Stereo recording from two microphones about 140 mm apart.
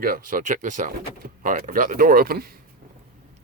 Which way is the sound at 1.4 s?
80° right.